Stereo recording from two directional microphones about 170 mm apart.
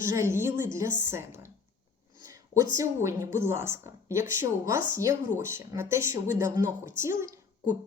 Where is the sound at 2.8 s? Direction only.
15° right (ahead or behind).